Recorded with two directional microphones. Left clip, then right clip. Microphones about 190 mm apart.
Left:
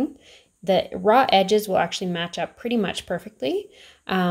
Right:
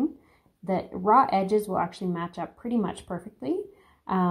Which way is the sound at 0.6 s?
35° left (ahead or behind).